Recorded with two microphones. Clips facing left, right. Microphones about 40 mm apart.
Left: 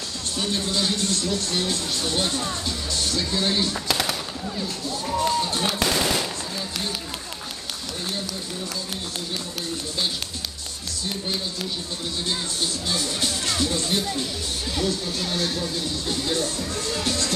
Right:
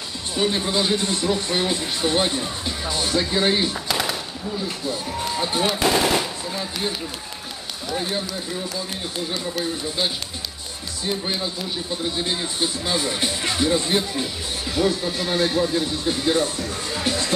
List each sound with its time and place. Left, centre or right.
0.4 s speech: right
3.7 s a sound: centre
5.4 s speech: centre
9.3 s speech: centre
12.2 s speech: right
16.9 s music: right